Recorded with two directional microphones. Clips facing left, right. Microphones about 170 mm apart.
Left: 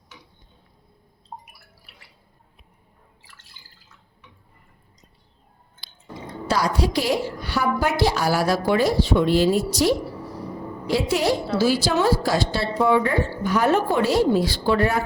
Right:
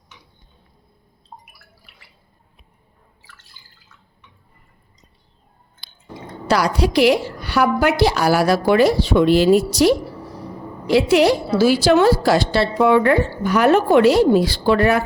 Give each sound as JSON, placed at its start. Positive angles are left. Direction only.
{"t": 1.3, "sound": "drip", "side_deg": 20}
{"t": 6.5, "sound": "a woman's voice", "side_deg": -75}